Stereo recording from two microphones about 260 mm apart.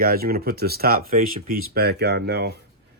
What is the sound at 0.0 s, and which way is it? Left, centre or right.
Speech, right.